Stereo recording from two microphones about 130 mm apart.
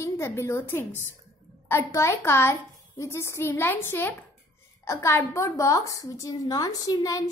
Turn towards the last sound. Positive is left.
turn(degrees=30)  # may be behind; listen again after turning